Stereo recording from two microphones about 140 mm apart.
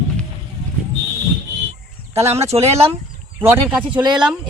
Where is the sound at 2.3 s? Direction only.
50° right (ahead or behind).